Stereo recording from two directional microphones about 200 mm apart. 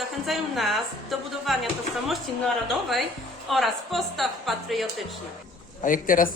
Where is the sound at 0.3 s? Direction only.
Centre (ahead or behind).